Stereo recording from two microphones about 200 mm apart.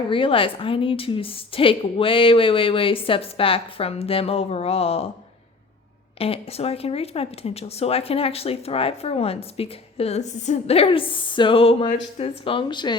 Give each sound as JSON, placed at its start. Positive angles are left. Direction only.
{"t": 0.1, "sound": "speech", "side_deg": 25}
{"t": 6.1, "sound": "speech", "side_deg": 30}